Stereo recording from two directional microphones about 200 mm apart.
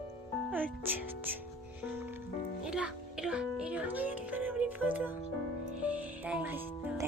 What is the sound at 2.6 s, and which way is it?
A child's voice, 5° right (ahead or behind).